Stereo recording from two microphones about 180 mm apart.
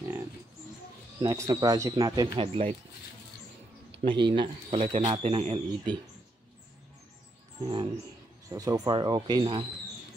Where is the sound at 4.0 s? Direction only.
25° right (ahead or behind).